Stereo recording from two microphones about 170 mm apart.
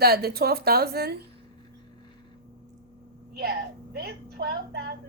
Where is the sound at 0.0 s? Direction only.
65° right (ahead or behind).